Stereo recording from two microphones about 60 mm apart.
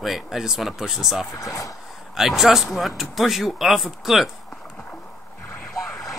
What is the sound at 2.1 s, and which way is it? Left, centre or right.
Speech, centre.